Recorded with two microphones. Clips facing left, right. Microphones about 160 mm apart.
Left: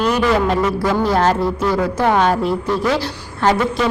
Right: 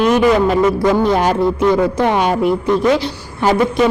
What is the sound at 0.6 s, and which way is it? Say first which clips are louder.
A woman's voice: right 4 dB; 20° right (ahead or behind).